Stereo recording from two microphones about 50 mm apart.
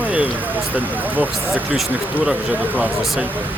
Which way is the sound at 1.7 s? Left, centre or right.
Right.